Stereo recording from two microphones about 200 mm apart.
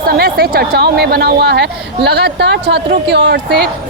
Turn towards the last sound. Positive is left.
turn(degrees=-55)  # may be behind; listen again after turning